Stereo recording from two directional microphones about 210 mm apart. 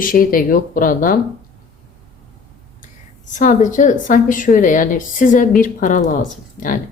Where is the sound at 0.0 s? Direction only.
40° left (ahead or behind).